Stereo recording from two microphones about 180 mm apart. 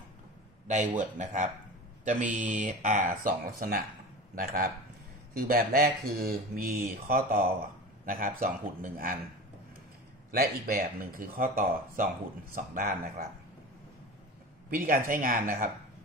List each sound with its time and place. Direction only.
0.7 s speech: 45° right (ahead or behind)
10.3 s speech: 55° right (ahead or behind)
14.7 s speech: 50° right (ahead or behind)